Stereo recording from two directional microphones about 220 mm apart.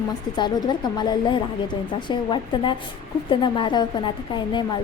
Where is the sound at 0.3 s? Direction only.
20° left (ahead or behind).